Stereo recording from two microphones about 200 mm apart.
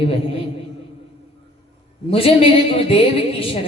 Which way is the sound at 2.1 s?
30° left (ahead or behind).